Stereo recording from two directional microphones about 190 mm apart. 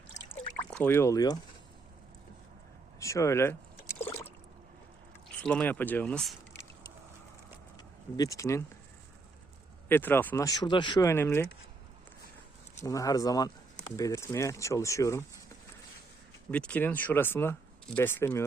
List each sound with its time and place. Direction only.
0.7 s speech: 10° left (ahead or behind)
3.0 s speech: 15° left (ahead or behind)
4.0 s a sound: 15° left (ahead or behind)
5.4 s speech: 5° left (ahead or behind)
8.1 s speech: 15° left (ahead or behind)
9.9 s speech: 10° left (ahead or behind)
12.8 s speech: 15° left (ahead or behind)
16.5 s speech: 5° left (ahead or behind)